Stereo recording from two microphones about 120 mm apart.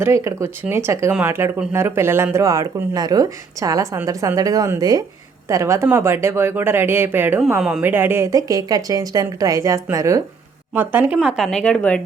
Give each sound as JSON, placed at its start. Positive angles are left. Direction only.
{"t": 0.0, "sound": "speech", "side_deg": -25}
{"t": 10.8, "sound": "speech", "side_deg": -15}